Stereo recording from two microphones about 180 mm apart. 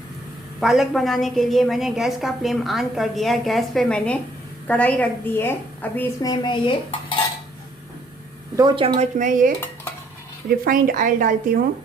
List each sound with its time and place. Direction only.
0.6 s a woman's voice: centre (ahead or behind)
6.2 s dishes: 25° left (ahead or behind)
8.5 s a woman's voice: 25° right (ahead or behind)
9.1 s a woman's voice: 45° right (ahead or behind)
10.7 s a woman's voice: 50° right (ahead or behind)